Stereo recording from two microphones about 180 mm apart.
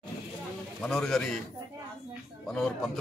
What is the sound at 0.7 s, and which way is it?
Speech, 5° left (ahead or behind).